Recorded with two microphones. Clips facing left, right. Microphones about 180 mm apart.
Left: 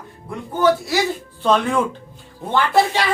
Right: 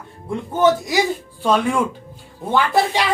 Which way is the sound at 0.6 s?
15° right (ahead or behind).